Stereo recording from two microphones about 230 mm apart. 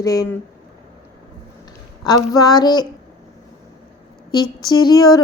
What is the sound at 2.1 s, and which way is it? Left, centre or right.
Speech, centre.